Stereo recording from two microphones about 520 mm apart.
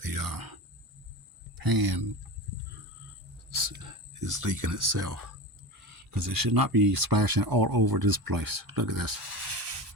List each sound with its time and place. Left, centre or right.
0.0 s speech: right
3.5 s speech: right